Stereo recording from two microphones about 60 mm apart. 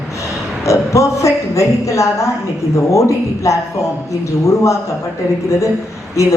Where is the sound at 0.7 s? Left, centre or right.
Left.